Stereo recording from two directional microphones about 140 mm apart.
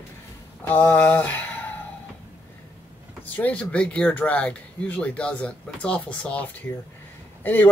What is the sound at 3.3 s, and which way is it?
Speech, 10° left (ahead or behind).